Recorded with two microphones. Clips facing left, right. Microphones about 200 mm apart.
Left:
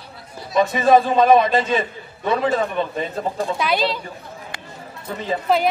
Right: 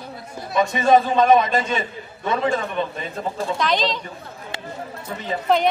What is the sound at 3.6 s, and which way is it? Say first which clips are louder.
Speech: even; 10° left (ahead or behind).